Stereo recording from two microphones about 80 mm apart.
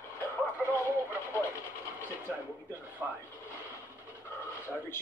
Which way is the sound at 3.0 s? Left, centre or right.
Centre.